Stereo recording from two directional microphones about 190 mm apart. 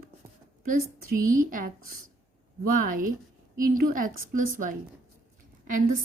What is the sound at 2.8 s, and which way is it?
A woman's voice, 45° right (ahead or behind).